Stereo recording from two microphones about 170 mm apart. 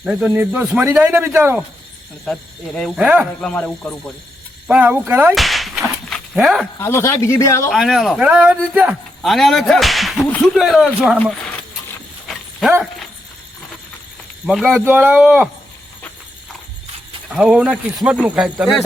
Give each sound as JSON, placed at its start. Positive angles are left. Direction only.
{"t": 0.0, "sound": "a man's voice", "side_deg": -5}
{"t": 2.2, "sound": "a man's voice", "side_deg": 5}
{"t": 3.4, "sound": "speech", "side_deg": 5}
{"t": 4.7, "sound": "speech", "side_deg": -5}
{"t": 6.7, "sound": "speech", "side_deg": 15}
{"t": 7.7, "sound": "a man's voice", "side_deg": 0}
{"t": 14.4, "sound": "a man's voice", "side_deg": -5}
{"t": 14.8, "sound": "a man's voice", "side_deg": -10}
{"t": 17.3, "sound": "a man's voice", "side_deg": -5}